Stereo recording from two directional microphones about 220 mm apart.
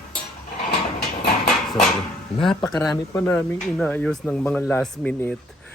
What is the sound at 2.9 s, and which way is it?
Speech, 15° left (ahead or behind).